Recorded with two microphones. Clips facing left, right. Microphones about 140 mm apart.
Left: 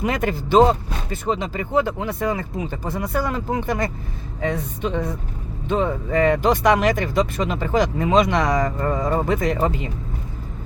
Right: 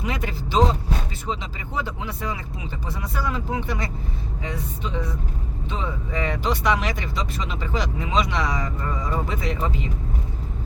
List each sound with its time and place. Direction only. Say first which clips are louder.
0.0 s speech: left 6 dB; 50° left (ahead or behind)